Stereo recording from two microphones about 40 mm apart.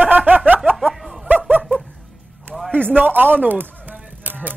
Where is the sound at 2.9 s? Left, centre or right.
Right.